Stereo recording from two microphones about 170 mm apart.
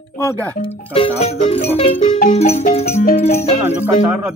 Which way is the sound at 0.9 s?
35° left (ahead or behind).